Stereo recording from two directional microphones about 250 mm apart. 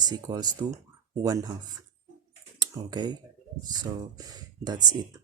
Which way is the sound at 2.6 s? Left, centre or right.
Centre.